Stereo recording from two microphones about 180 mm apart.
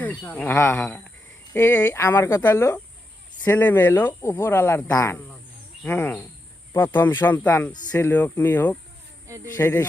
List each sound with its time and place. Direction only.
0.0 s speech: 10° left (ahead or behind)
9.2 s speech: 15° right (ahead or behind)
9.6 s speech: 15° left (ahead or behind)